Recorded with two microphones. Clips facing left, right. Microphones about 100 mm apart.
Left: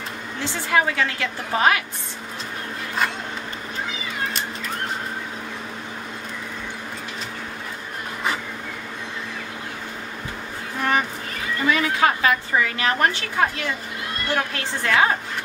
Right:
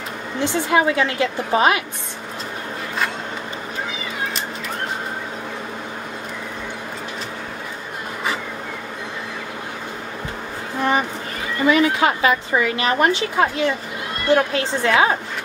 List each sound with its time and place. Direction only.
0.4 s a woman's voice: 20° right (ahead or behind)
10.8 s a sound: 20° right (ahead or behind)
11.6 s a woman's voice: 20° right (ahead or behind)